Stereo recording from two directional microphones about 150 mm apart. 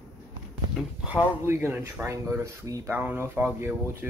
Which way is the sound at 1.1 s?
15° right (ahead or behind).